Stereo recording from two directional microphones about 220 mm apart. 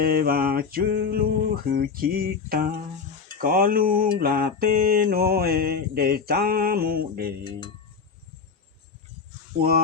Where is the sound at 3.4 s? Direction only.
40° right (ahead or behind).